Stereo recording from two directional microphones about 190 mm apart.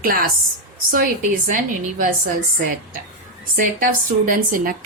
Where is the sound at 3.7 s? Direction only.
45° right (ahead or behind).